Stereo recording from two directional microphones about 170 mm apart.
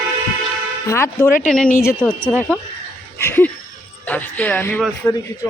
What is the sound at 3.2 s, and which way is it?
A woman's voice, 15° left (ahead or behind).